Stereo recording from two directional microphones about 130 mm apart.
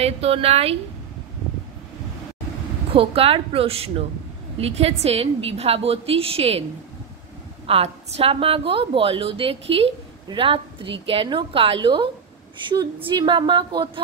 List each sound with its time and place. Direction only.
0.0 s a woman's voice: 50° right (ahead or behind)
2.9 s a woman's voice: 45° right (ahead or behind)
7.6 s a woman's voice: 50° right (ahead or behind)